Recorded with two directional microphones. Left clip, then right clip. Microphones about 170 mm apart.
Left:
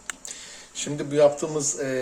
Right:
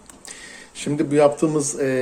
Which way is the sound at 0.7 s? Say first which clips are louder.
Right 5 dB; 30° right (ahead or behind).